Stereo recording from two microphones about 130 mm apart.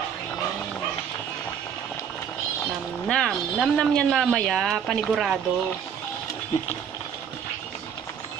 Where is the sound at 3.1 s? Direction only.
5° left (ahead or behind).